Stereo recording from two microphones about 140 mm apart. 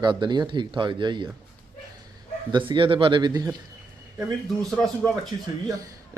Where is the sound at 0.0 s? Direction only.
35° right (ahead or behind).